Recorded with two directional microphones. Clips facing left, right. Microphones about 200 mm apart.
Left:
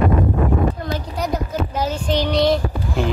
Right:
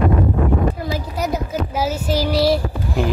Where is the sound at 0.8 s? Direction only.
10° right (ahead or behind).